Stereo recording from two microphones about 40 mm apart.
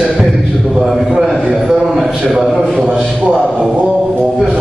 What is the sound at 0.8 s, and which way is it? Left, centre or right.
A man's voice, centre.